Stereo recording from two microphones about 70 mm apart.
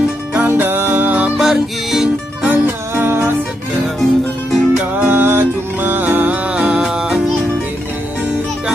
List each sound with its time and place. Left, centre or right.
0.6 s music: right
1.4 s music: centre
2.4 s music: centre
3.1 s music: right
4.0 s music: centre
5.0 s music: right
6.5 s music: centre